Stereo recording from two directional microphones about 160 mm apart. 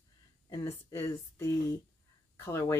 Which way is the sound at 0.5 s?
20° left (ahead or behind).